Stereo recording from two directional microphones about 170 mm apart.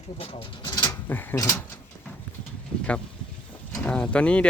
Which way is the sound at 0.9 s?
10° left (ahead or behind).